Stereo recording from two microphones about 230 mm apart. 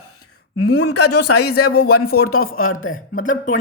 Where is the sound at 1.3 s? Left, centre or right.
Left.